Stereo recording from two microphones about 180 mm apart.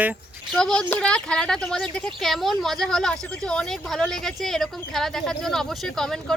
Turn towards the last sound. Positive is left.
turn(degrees=0)  # may be behind; listen again after turning